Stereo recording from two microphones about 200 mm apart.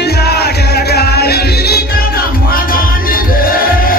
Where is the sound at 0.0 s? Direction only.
55° left (ahead or behind).